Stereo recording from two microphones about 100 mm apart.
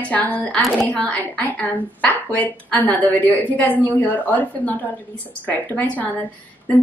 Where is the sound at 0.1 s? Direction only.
15° left (ahead or behind).